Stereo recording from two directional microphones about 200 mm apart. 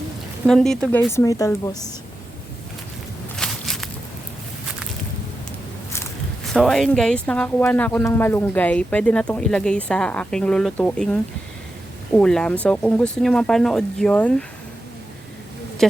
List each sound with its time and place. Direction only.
0.4 s a woman's voice: centre (ahead or behind)
3.3 s walk: centre (ahead or behind)
6.4 s speech: centre (ahead or behind)
15.8 s speech: centre (ahead or behind)